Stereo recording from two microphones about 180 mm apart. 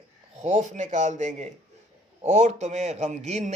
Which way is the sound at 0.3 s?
40° right (ahead or behind).